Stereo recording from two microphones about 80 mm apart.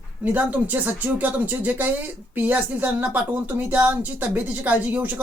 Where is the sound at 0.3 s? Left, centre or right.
Centre.